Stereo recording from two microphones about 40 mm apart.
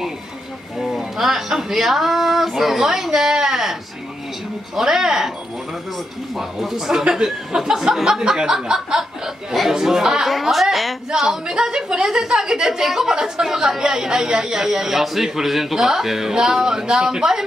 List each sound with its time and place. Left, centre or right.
0.7 s a woman's voice: centre
4.7 s a woman's voice: centre
6.9 s a woman's voice: centre
8.2 s a sound: centre
8.6 s a woman's voice: centre
10.2 s speech: centre
11.1 s a woman's voice: centre